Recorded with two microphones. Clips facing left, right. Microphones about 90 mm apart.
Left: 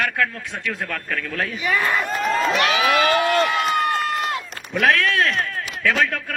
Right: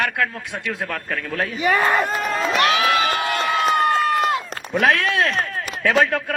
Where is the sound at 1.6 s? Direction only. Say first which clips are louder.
Right 4 dB; 45° right (ahead or behind).